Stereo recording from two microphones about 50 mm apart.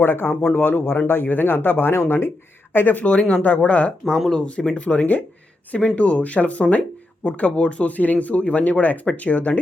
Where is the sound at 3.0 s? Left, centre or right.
Left.